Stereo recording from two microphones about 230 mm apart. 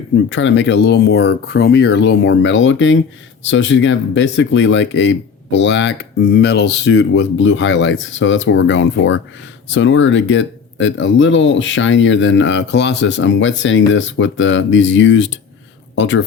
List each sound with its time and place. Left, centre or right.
0.3 s speech: left